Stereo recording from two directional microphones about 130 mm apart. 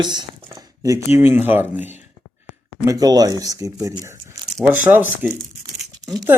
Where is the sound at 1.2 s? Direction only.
15° right (ahead or behind).